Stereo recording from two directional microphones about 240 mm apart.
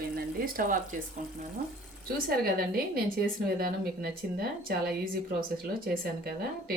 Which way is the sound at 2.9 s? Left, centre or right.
Right.